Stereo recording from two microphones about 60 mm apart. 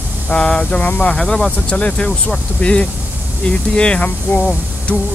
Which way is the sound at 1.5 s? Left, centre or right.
Centre.